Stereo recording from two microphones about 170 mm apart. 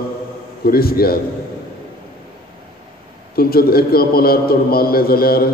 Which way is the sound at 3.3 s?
60° left (ahead or behind).